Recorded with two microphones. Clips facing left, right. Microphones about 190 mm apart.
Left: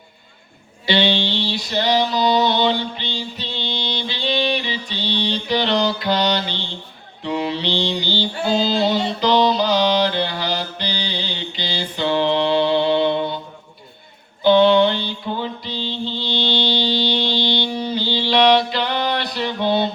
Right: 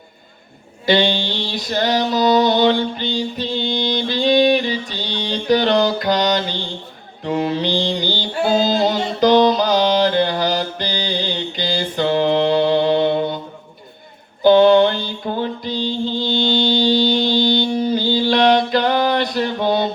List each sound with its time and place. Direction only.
0.9 s a sound: 45° right (ahead or behind)
7.3 s mantra: 45° right (ahead or behind)
14.4 s mantra: 45° right (ahead or behind)